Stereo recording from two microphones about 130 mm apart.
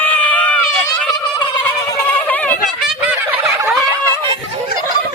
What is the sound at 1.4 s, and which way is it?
Fowl, 35° left (ahead or behind).